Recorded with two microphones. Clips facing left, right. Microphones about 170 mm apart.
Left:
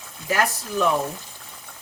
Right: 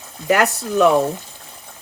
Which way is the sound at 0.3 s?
70° right (ahead or behind).